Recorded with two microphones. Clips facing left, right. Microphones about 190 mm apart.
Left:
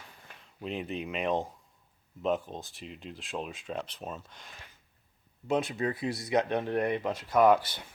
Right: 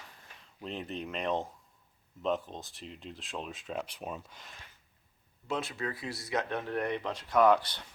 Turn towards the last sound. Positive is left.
turn(degrees=10)  # may be behind; listen again after turning